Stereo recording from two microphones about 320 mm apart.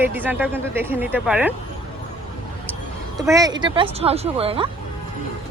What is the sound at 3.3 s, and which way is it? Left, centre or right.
Speech, centre.